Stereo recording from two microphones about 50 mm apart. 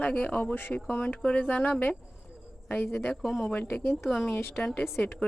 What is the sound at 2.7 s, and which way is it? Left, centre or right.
Speech, left.